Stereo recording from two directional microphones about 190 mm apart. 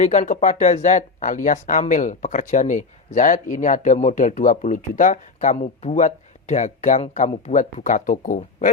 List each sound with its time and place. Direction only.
0.0 s speech: 40° left (ahead or behind)